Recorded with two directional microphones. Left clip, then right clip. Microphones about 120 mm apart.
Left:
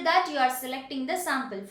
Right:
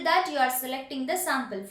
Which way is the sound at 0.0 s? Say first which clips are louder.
Even; 25° left (ahead or behind).